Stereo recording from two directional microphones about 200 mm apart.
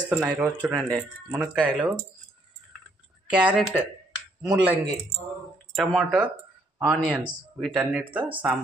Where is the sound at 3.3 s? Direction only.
5° right (ahead or behind).